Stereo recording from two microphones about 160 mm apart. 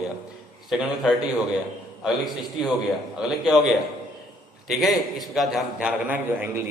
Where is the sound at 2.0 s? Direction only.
Centre (ahead or behind).